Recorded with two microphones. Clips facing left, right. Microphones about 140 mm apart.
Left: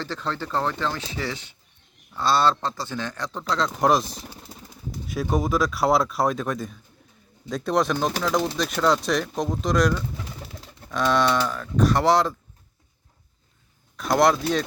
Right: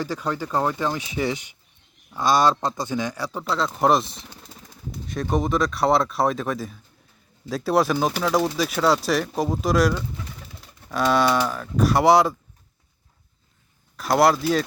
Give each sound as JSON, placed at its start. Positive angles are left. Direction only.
{"t": 0.0, "sound": "speech", "side_deg": -10}
{"t": 13.9, "sound": "speech", "side_deg": -5}